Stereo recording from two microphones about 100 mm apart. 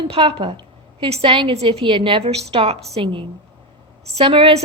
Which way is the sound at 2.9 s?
60° right (ahead or behind).